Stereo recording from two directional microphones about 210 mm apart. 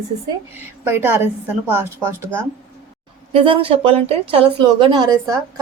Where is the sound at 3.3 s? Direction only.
25° right (ahead or behind).